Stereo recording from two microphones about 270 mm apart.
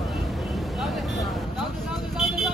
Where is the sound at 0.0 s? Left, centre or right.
Centre.